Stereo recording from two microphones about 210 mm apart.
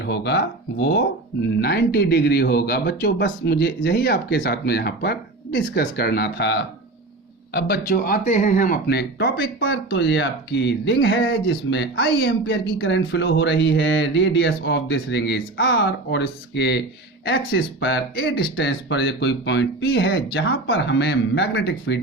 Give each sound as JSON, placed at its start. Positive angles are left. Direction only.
{"t": 0.0, "sound": "speech", "side_deg": 50}